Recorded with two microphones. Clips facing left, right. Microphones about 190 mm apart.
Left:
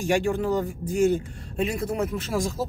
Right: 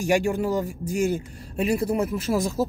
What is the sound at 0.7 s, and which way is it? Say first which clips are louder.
Speech: left 2 dB; centre (ahead or behind).